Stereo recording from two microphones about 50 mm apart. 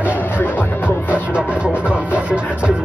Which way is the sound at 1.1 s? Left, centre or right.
Right.